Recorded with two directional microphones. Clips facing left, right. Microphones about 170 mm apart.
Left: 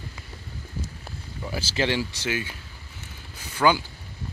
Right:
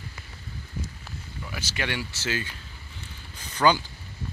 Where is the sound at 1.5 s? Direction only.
30° left (ahead or behind).